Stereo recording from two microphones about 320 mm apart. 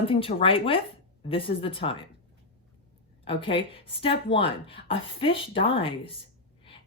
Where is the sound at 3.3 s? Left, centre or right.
Centre.